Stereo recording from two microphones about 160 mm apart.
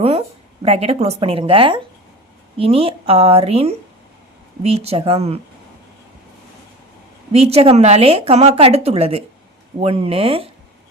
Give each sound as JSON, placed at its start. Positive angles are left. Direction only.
{"t": 0.0, "sound": "a woman's voice", "side_deg": -40}
{"t": 7.3, "sound": "a woman's voice", "side_deg": -40}